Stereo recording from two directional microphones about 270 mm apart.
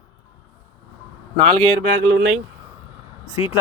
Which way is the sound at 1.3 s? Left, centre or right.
Centre.